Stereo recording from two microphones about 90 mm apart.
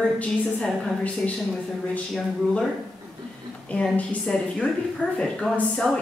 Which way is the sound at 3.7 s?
15° left (ahead or behind).